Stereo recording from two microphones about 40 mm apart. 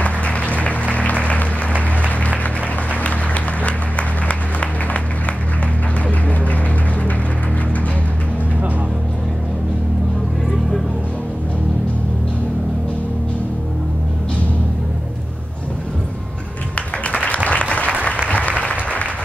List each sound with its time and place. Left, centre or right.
0.0 s music: left
3.0 s music: left
4.3 s applause: left
6.0 s music: left
16.7 s music: left
17.5 s applause: left